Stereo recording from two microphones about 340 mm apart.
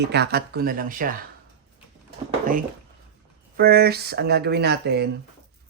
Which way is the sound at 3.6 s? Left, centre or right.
Right.